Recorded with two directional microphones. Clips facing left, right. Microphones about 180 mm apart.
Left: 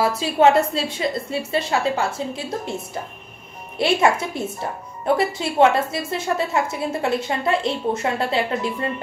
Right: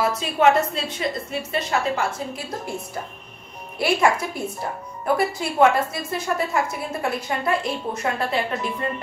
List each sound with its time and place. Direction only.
0.0 s a woman's voice: 30° left (ahead or behind)